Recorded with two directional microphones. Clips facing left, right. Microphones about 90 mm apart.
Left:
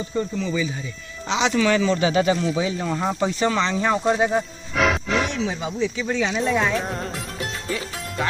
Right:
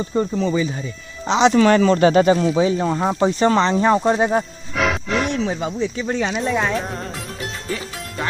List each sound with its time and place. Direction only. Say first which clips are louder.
0.2 s speech: right 5 dB; 40° right (ahead or behind)
4.7 s music: even; centre (ahead or behind)
5.4 s speech: right 2 dB; 50° right (ahead or behind)
6.3 s speech: right 1 dB; 5° right (ahead or behind)